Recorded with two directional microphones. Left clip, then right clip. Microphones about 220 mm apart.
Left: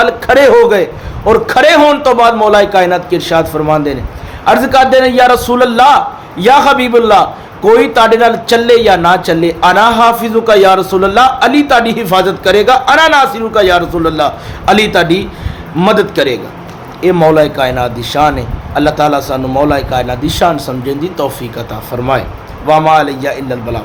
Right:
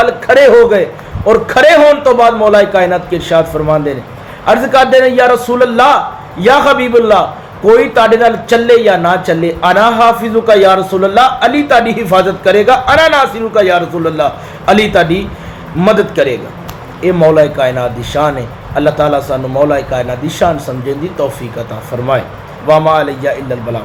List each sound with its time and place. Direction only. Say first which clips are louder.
0.0 s a man's voice: even; 20° left (ahead or behind)